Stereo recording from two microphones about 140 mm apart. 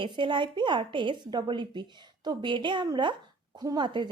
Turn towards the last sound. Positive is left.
turn(degrees=-35)  # may be behind; listen again after turning